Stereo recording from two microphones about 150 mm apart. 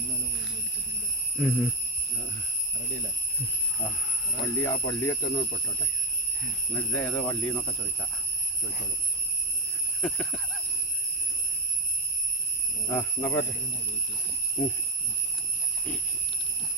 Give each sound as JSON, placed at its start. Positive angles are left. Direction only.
{"t": 1.4, "sound": "speech", "side_deg": -5}
{"t": 4.5, "sound": "speech", "side_deg": 20}
{"t": 6.7, "sound": "speech", "side_deg": 10}
{"t": 10.0, "sound": "speech", "side_deg": 10}
{"t": 12.9, "sound": "speech", "side_deg": 15}